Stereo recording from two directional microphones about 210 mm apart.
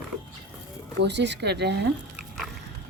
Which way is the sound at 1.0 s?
55° right (ahead or behind).